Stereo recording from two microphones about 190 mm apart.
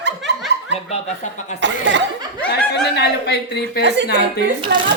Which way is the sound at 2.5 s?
60° left (ahead or behind).